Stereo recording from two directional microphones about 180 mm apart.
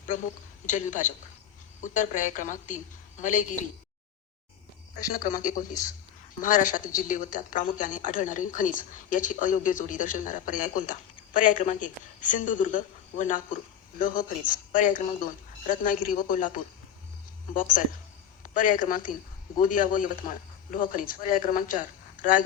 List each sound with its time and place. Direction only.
0.6 s speech: 45° left (ahead or behind)
4.9 s speech: 50° left (ahead or behind)
17.5 s speech: 50° left (ahead or behind)